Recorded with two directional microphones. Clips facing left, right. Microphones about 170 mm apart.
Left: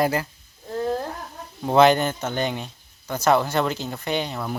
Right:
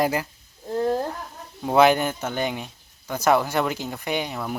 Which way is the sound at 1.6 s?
10° right (ahead or behind).